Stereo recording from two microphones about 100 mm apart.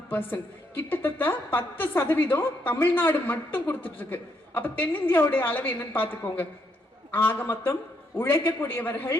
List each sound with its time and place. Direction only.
0.1 s a woman's voice: 20° left (ahead or behind)